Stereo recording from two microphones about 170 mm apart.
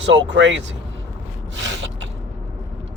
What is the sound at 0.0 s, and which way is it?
Speech, 90° right.